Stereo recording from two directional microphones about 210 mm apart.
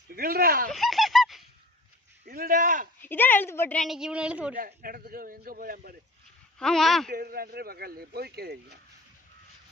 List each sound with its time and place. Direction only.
0.1 s speech: 45° right (ahead or behind)
0.7 s honk: centre (ahead or behind)
2.2 s speech: 45° right (ahead or behind)
3.0 s a woman's voice: 10° left (ahead or behind)
4.5 s speech: 40° right (ahead or behind)
6.6 s a woman's voice: centre (ahead or behind)
7.1 s speech: 45° right (ahead or behind)